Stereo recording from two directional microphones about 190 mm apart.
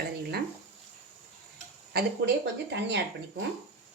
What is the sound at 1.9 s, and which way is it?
Speech, 60° right (ahead or behind).